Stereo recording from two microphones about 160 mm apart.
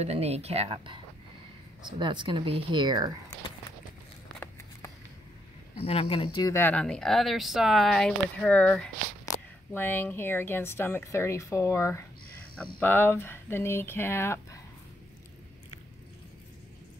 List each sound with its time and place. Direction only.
0.0 s speech: 40° right (ahead or behind)
2.0 s speech: 30° right (ahead or behind)
5.8 s speech: 40° left (ahead or behind)
6.5 s speech: 10° left (ahead or behind)
9.2 s speech: 15° left (ahead or behind)